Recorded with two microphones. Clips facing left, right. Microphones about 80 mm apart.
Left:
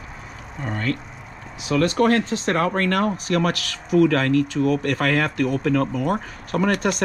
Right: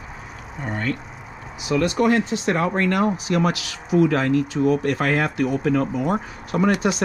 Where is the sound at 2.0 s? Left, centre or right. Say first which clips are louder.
Even; left.